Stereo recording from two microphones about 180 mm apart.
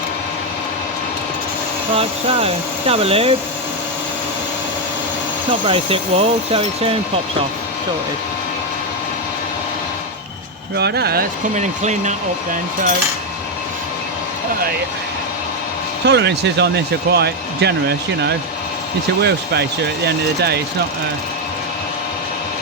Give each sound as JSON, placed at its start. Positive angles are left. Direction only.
{"t": 2.0, "sound": "speech", "side_deg": -35}
{"t": 5.5, "sound": "speech", "side_deg": -30}
{"t": 10.8, "sound": "speech", "side_deg": -65}
{"t": 11.5, "sound": "speech", "side_deg": -40}
{"t": 16.0, "sound": "speech", "side_deg": -75}